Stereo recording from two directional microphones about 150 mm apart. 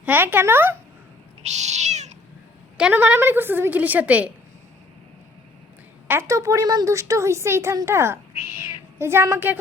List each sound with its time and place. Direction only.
0.0 s a woman's voice: 15° right (ahead or behind)
1.4 s cat: 50° right (ahead or behind)
2.7 s a woman's voice: 10° right (ahead or behind)
6.1 s a woman's voice: 20° right (ahead or behind)